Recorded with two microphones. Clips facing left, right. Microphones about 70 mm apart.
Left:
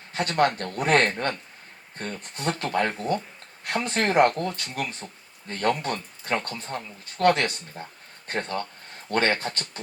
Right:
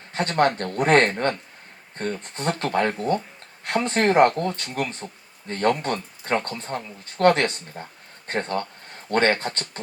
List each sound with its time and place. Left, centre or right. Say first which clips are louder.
0.1 s speech: right 2 dB; right